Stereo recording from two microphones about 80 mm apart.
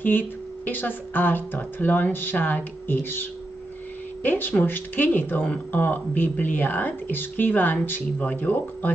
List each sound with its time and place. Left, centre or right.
0.7 s speech: left